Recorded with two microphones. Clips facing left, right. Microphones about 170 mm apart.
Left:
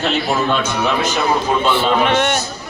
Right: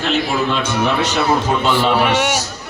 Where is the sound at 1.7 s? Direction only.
10° right (ahead or behind).